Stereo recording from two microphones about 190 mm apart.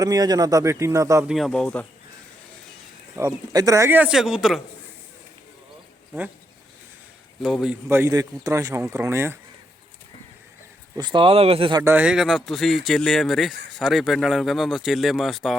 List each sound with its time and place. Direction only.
0.0 s speech: 20° right (ahead or behind)
1.3 s speech: centre (ahead or behind)
3.2 s speech: 15° right (ahead or behind)
7.4 s speech: centre (ahead or behind)
7.9 s speech: 15° right (ahead or behind)
10.9 s speech: 25° right (ahead or behind)
11.8 s speech: 10° right (ahead or behind)